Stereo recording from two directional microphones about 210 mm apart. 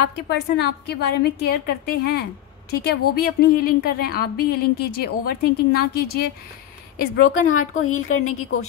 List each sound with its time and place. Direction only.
0.0 s a woman's voice: 50° left (ahead or behind)
7.4 s a woman's voice: 85° left